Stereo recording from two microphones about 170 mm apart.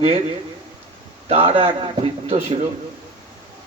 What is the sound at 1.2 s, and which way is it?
A man's voice, 30° right (ahead or behind).